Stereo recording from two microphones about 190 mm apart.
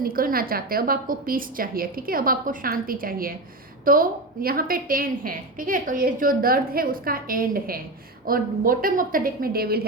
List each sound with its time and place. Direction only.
0.0 s a woman's voice: 50° right (ahead or behind)